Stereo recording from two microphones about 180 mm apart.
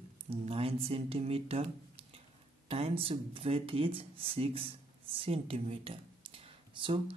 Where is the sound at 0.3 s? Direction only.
35° right (ahead or behind).